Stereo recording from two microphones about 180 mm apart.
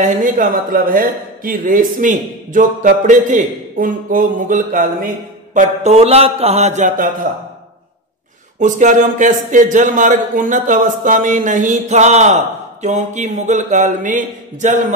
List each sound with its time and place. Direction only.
0.0 s speech: 50° right (ahead or behind)
8.5 s speech: 45° right (ahead or behind)